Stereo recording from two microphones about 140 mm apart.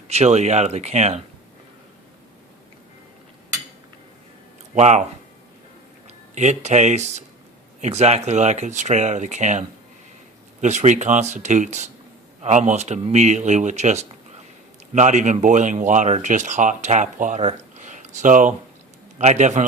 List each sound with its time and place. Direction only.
0.1 s speech: 50° right (ahead or behind)
4.7 s speech: 55° right (ahead or behind)
6.3 s speech: 55° right (ahead or behind)